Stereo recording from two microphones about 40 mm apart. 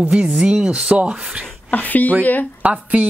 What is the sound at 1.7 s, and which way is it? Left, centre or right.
Speech, left.